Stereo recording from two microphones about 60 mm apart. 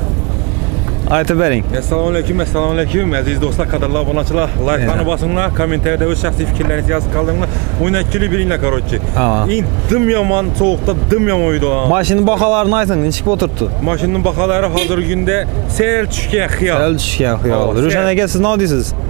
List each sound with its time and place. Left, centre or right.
1.1 s speech: centre